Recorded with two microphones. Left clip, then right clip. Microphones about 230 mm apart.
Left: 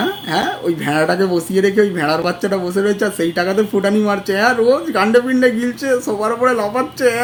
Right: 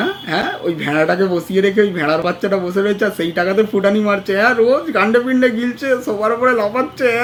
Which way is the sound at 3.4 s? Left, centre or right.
Centre.